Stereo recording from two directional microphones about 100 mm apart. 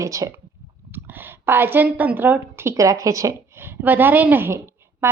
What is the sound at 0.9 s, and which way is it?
A woman's voice, 20° right (ahead or behind).